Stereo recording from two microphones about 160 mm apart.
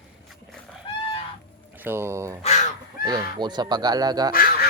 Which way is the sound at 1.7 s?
15° right (ahead or behind).